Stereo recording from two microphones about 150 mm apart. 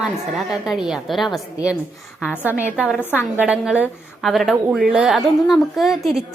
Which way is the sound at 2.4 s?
10° right (ahead or behind).